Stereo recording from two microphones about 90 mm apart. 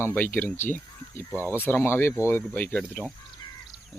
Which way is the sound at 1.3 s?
30° right (ahead or behind).